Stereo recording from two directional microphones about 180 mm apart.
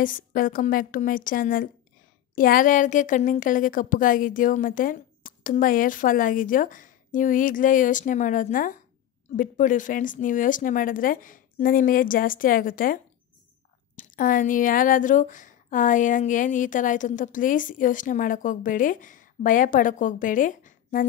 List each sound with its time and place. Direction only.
0.0 s speech: 50° left (ahead or behind)